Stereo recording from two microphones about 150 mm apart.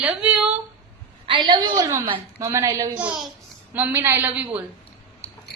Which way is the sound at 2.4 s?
20° right (ahead or behind).